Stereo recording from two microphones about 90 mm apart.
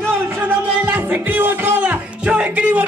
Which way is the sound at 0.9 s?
20° right (ahead or behind).